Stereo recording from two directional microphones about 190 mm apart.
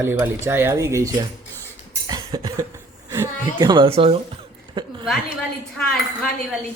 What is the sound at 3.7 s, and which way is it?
Speech, 25° right (ahead or behind).